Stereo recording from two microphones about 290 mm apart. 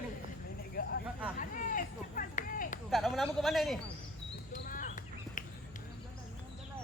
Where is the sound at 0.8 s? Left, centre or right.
Left.